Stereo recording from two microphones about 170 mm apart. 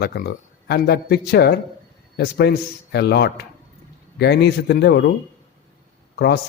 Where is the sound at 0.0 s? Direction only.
65° left (ahead or behind).